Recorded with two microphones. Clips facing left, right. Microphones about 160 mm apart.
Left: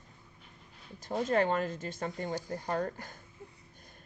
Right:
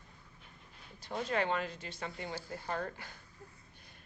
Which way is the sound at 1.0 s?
45° left (ahead or behind).